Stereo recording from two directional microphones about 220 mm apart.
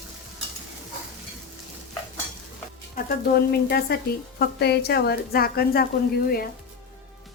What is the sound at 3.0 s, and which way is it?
Speech, 40° left (ahead or behind).